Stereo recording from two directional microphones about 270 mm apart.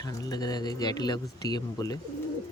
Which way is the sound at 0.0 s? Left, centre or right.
Centre.